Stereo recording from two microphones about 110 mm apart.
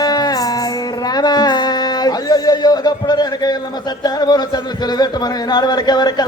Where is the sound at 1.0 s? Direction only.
40° left (ahead or behind).